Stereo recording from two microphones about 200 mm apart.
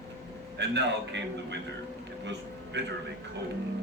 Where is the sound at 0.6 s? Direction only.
60° right (ahead or behind).